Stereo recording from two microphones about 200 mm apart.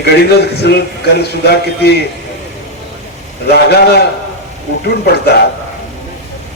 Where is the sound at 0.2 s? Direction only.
55° left (ahead or behind).